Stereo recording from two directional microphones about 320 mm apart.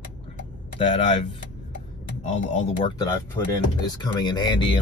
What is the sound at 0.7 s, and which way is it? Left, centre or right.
Speech, centre.